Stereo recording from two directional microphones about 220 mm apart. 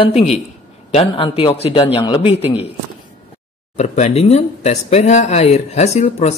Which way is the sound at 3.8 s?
30° left (ahead or behind).